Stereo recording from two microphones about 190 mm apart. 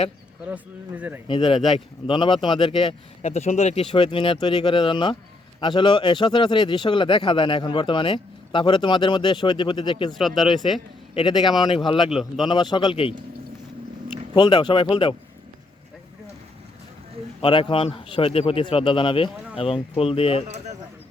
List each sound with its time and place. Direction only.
0.4 s speech: 10° right (ahead or behind)
1.3 s a man's voice: 25° left (ahead or behind)
1.5 s speech: centre (ahead or behind)
2.0 s a man's voice: 25° left (ahead or behind)
10.2 s speech: centre (ahead or behind)
11.1 s a man's voice: 25° left (ahead or behind)
12.1 s speech: centre (ahead or behind)
12.5 s a man's voice: 25° left (ahead or behind)
14.3 s a man's voice: 25° left (ahead or behind)
17.4 s a man's voice: 30° left (ahead or behind)